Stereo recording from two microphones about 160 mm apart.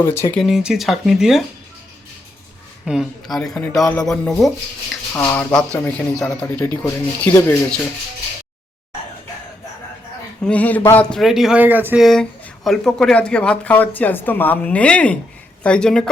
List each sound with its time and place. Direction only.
0.0 s speech: 15° left (ahead or behind)
0.3 s speech: centre (ahead or behind)
2.8 s speech: 5° right (ahead or behind)
5.1 s speech: 15° left (ahead or behind)
10.4 s speech: 10° left (ahead or behind)
11.2 s speech: centre (ahead or behind)
12.0 s speech: centre (ahead or behind)